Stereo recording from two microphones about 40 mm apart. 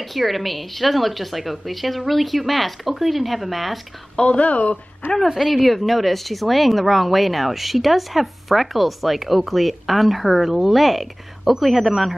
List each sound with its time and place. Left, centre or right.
0.0 s speech: centre
4.2 s speech: left
5.3 s speech: centre